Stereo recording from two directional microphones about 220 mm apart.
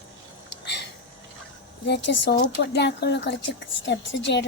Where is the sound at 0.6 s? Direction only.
50° left (ahead or behind).